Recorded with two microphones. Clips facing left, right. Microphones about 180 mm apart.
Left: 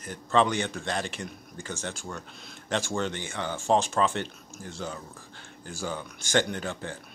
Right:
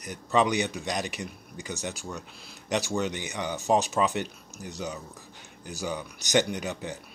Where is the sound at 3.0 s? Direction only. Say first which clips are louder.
Right 1 dB; 15° right (ahead or behind).